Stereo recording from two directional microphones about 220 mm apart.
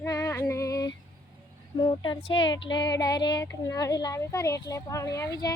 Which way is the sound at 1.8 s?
20° left (ahead or behind).